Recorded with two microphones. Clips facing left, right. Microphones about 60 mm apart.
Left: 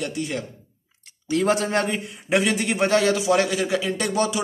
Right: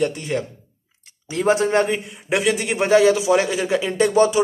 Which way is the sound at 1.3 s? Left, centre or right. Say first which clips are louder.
Right 2 dB; centre.